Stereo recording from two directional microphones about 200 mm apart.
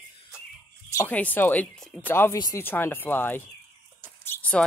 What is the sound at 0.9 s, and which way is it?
Speech, 10° left (ahead or behind).